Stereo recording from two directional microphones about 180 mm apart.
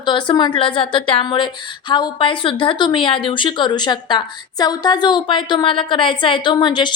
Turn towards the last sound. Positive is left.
turn(degrees=25)  # may be behind; listen again after turning